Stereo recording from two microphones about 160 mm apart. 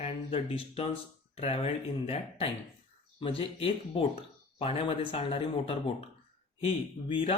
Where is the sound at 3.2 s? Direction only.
35° left (ahead or behind).